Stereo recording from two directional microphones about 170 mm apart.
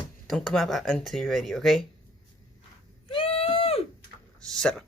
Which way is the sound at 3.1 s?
35° left (ahead or behind).